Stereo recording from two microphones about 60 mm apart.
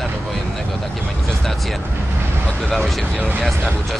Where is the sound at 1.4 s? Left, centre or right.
Centre.